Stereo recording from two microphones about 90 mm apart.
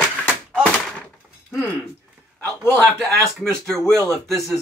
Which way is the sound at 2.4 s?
20° left (ahead or behind).